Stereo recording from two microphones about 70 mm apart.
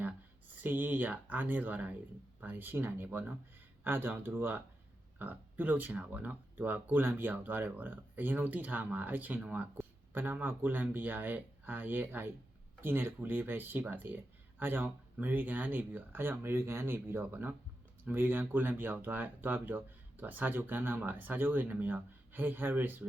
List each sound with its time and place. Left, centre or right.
0.6 s speech: right